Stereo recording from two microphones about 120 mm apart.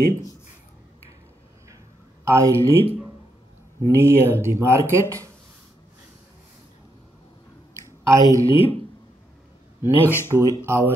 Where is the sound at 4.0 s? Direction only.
20° right (ahead or behind).